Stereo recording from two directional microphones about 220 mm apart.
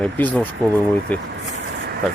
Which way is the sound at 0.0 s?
5° left (ahead or behind).